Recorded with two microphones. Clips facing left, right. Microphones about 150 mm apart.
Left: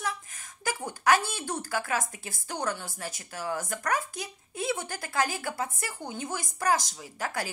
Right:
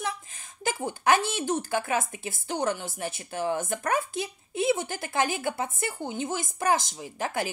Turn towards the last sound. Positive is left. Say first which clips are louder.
# right 4 dB
turn(degrees=-20)  # may be behind; listen again after turning